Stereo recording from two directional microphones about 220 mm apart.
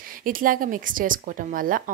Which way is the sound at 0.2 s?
40° right (ahead or behind).